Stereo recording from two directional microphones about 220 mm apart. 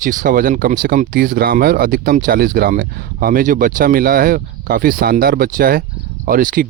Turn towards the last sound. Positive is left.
turn(degrees=-40)  # may be behind; listen again after turning